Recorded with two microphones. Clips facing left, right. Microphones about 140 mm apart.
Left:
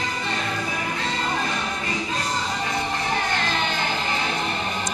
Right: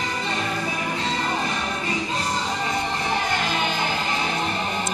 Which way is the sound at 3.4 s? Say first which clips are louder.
Right 1 dB; 10° right (ahead or behind).